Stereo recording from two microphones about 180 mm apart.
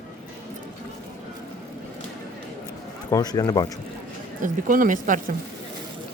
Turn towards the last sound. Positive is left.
turn(degrees=-50)  # may be behind; listen again after turning